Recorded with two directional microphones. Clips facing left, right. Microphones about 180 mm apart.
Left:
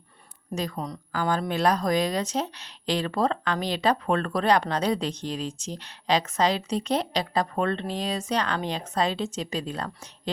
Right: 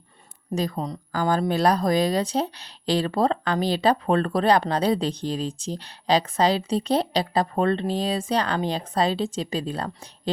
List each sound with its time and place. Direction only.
0.5 s speech: 35° right (ahead or behind)